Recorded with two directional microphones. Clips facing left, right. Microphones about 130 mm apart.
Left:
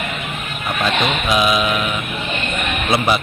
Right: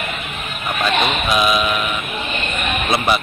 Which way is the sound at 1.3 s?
20° left (ahead or behind).